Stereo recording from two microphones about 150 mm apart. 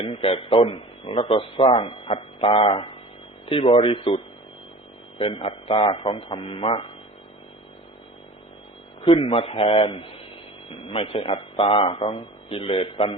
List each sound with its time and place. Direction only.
0.0 s a man's voice: 40° left (ahead or behind)
9.0 s a man's voice: 35° left (ahead or behind)